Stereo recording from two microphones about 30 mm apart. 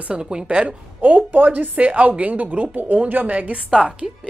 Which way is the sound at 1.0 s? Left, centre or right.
Right.